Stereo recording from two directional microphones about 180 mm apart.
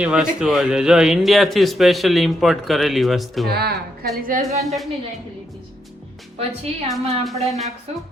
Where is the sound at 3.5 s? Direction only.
60° right (ahead or behind).